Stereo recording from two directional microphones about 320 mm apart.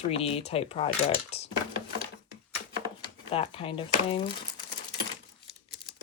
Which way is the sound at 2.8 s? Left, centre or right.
Centre.